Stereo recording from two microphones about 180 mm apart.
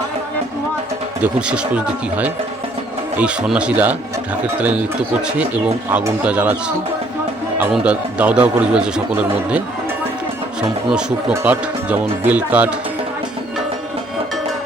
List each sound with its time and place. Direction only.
1.2 s a man's voice: 5° right (ahead or behind)
5.9 s a man's voice: 10° right (ahead or behind)
7.6 s a man's voice: 5° right (ahead or behind)
10.8 s a man's voice: 5° right (ahead or behind)